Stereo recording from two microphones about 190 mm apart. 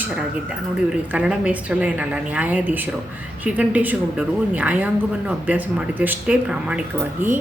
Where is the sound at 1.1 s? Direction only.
5° right (ahead or behind).